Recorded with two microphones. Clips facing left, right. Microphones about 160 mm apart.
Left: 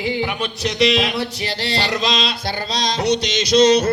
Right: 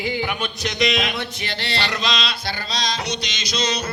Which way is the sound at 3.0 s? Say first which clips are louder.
Left 10 dB; 65° left (ahead or behind).